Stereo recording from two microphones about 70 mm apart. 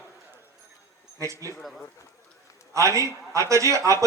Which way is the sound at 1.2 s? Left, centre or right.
Right.